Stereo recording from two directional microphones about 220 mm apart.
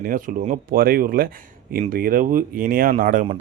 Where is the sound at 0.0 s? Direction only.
40° right (ahead or behind).